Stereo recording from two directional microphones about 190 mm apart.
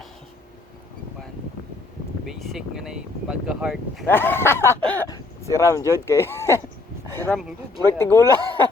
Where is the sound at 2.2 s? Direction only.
Centre (ahead or behind).